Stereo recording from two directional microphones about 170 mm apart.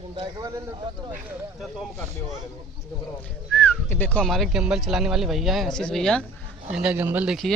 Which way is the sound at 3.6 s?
10° left (ahead or behind).